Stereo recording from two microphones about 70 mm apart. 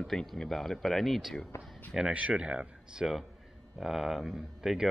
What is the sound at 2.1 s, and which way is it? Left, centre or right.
Speech, centre.